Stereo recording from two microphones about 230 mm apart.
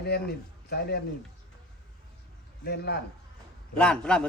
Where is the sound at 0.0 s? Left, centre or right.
Left.